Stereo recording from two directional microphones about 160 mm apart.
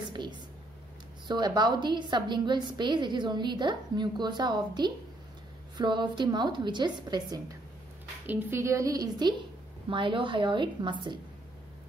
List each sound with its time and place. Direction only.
0.1 s a sound: 30° right (ahead or behind)
1.2 s a woman's voice: 25° right (ahead or behind)
8.3 s a woman's voice: 15° right (ahead or behind); by 11.1 s 30° right (ahead or behind)